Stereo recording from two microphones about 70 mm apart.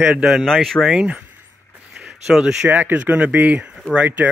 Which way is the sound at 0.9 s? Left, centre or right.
Centre.